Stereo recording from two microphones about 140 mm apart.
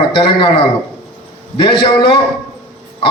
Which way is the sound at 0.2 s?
35° left (ahead or behind).